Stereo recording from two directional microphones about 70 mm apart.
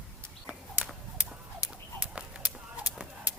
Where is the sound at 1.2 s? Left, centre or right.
Centre.